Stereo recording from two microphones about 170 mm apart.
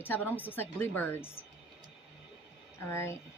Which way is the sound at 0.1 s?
10° left (ahead or behind).